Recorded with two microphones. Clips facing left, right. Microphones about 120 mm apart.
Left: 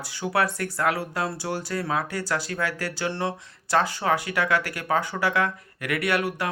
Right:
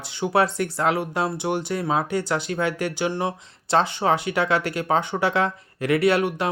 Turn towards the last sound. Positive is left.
turn(degrees=-25)  # may be behind; listen again after turning